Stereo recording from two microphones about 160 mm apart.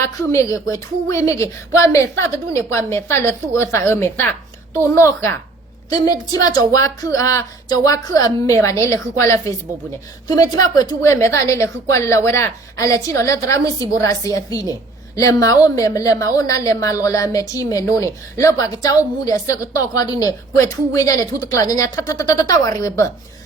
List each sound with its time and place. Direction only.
0.0 s a woman's voice: 15° left (ahead or behind)